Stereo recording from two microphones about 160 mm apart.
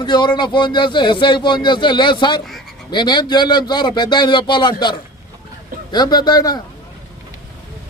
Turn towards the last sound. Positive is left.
turn(degrees=25)  # may be behind; listen again after turning